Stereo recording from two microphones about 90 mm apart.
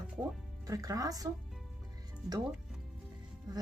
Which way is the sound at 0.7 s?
40° right (ahead or behind).